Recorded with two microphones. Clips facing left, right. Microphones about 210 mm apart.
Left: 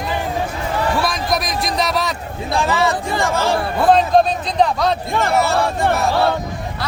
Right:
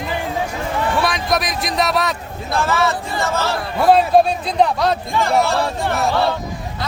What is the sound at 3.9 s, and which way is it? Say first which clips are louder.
Speech: right 1 dB; 10° right (ahead or behind).